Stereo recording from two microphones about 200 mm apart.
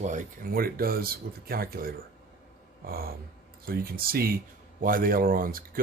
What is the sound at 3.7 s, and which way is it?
Speech, 50° right (ahead or behind).